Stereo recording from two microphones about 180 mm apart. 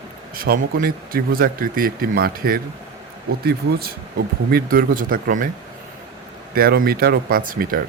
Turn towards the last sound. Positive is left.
turn(degrees=-50)  # may be behind; listen again after turning